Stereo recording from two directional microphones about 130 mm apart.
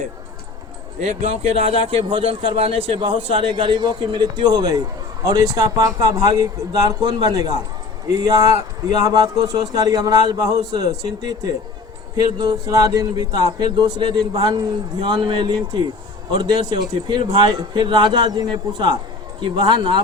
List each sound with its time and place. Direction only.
1.0 s a man's voice: 55° right (ahead or behind); by 20.0 s 40° right (ahead or behind)